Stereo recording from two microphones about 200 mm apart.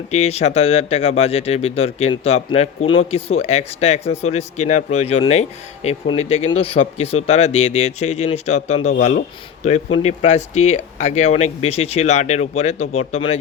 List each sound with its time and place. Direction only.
0.1 s speech: 35° left (ahead or behind)
10.0 s speech: 30° left (ahead or behind)